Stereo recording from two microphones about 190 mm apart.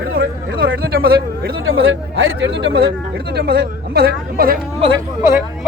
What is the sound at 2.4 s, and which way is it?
Speech, 70° right (ahead or behind).